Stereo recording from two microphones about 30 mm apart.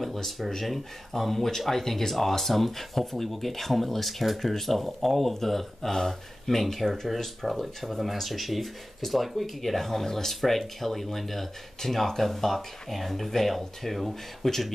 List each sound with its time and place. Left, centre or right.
0.0 s speech: centre